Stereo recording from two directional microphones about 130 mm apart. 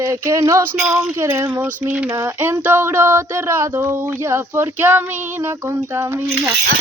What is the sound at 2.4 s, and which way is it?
Speech, 15° right (ahead or behind).